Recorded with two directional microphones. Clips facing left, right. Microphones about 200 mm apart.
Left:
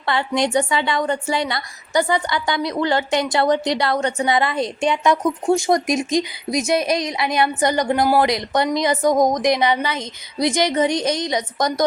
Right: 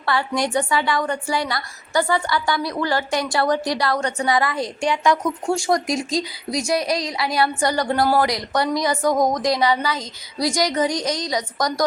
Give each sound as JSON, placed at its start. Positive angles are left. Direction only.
{"t": 0.0, "sound": "a woman's voice", "side_deg": 20}